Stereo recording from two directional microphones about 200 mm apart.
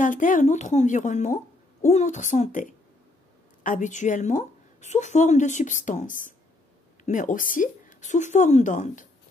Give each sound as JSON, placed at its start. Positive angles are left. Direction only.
{"t": 0.0, "sound": "speech", "side_deg": 40}